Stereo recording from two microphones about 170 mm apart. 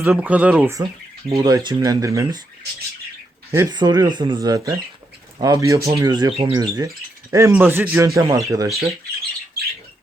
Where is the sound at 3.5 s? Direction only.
20° right (ahead or behind).